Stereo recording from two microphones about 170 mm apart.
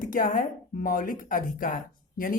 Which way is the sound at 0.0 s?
55° left (ahead or behind).